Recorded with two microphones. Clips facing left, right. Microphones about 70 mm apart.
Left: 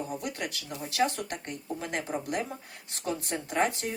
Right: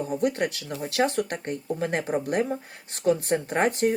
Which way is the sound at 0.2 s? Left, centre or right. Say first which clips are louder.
Right 10 dB; right.